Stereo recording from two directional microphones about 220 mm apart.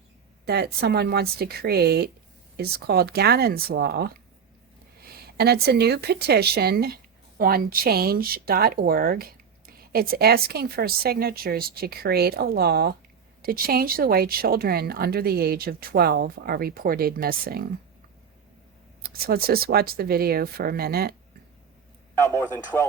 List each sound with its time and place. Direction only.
0.4 s a woman's voice: 45° right (ahead or behind)
19.0 s a woman's voice: 45° right (ahead or behind)
22.4 s a man's voice: 10° left (ahead or behind)